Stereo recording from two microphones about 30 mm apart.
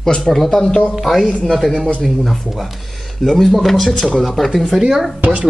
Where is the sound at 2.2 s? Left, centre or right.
Centre.